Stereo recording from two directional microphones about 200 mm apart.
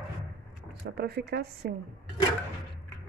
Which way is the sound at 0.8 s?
55° right (ahead or behind).